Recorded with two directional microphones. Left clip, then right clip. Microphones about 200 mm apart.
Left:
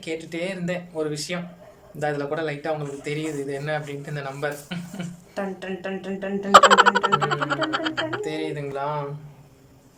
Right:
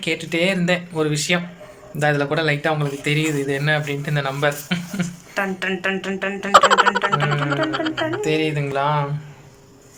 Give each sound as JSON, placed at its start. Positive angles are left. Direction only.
{"t": 0.0, "sound": "a man's voice", "side_deg": 0}
{"t": 5.3, "sound": "speech", "side_deg": 15}
{"t": 6.5, "sound": "a man's voice", "side_deg": 0}